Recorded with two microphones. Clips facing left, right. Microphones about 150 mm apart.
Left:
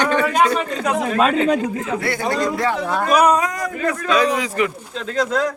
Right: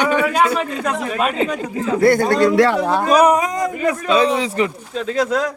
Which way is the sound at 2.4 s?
80° right.